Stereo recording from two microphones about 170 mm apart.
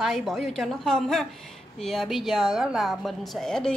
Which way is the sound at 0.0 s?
Centre (ahead or behind).